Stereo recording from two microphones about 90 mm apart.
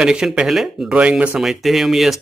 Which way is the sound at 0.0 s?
10° right (ahead or behind).